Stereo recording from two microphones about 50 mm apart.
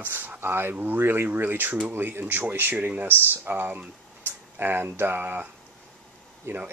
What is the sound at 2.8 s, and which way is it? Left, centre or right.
Speech, right.